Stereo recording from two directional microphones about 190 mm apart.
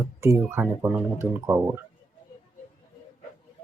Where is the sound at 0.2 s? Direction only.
15° right (ahead or behind).